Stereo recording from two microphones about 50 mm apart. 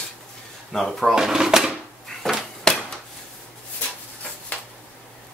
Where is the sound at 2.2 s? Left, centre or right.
Centre.